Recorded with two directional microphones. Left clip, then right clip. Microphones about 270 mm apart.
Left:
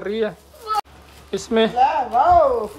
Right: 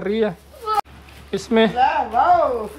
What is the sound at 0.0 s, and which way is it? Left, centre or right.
Speech, centre.